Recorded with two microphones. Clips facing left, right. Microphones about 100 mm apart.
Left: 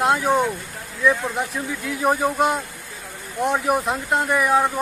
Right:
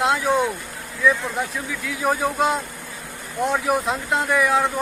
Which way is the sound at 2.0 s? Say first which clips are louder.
Left 1 dB; 5° left (ahead or behind).